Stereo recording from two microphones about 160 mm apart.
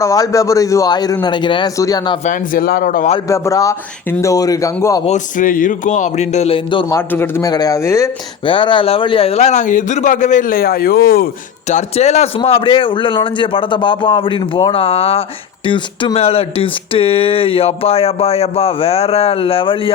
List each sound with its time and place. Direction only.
0.0 s a man's voice: 20° left (ahead or behind)
2.2 s speech: 60° left (ahead or behind)
3.2 s a man's voice: 20° left (ahead or behind)
5.0 s a man's voice: 50° left (ahead or behind); by 6.8 s 35° left (ahead or behind)
6.9 s a man's voice: 15° left (ahead or behind)
8.4 s a man's voice: 30° left (ahead or behind); by 11.3 s 70° left (ahead or behind)
11.7 s a man's voice: 45° left (ahead or behind)